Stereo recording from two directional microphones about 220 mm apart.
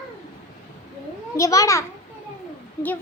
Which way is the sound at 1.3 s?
15° left (ahead or behind).